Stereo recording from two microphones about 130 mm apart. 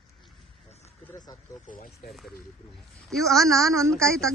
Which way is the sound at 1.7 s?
90° left.